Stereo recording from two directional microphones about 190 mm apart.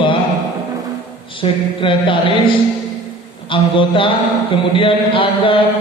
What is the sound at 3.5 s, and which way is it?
Mantra, 25° left (ahead or behind).